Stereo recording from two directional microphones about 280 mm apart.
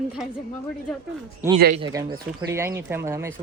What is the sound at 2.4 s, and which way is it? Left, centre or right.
Speech, centre.